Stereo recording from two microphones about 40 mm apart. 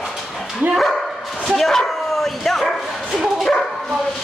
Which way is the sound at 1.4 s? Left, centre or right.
Centre.